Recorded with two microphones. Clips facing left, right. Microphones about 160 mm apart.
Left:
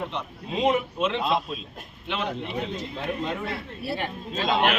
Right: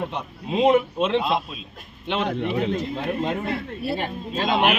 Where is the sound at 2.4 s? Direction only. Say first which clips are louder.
Right 7 dB; 65° right (ahead or behind).